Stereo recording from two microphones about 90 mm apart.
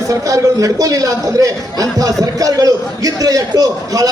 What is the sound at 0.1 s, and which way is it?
A man's voice, 40° right (ahead or behind).